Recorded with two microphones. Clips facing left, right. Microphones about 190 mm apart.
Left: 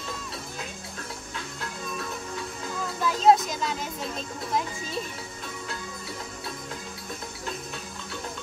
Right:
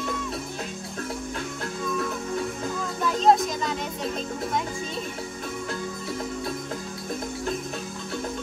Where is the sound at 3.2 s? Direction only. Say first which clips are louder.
Even; centre (ahead or behind).